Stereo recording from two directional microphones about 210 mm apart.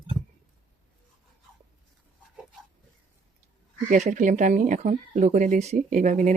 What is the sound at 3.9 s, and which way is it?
Speech, 35° right (ahead or behind).